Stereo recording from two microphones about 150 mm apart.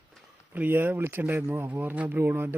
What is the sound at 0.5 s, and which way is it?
Speech, 10° right (ahead or behind).